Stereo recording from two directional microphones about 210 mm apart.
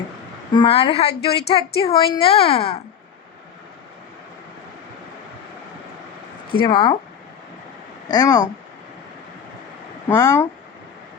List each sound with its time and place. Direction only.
0.5 s a woman's voice: 25° left (ahead or behind)
6.6 s a woman's voice: 20° left (ahead or behind)
8.1 s speech: 20° left (ahead or behind)
10.1 s speech: 15° left (ahead or behind)